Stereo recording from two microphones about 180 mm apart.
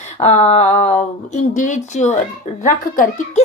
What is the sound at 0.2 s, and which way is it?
A woman's voice, 35° left (ahead or behind).